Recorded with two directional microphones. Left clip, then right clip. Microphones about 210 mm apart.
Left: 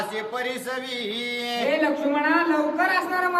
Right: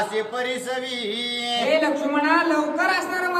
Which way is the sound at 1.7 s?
10° right (ahead or behind).